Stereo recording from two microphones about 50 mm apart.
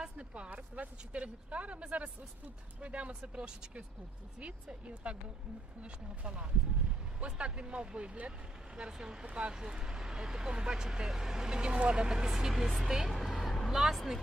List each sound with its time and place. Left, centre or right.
0.0 s speech: right; by 14.2 s centre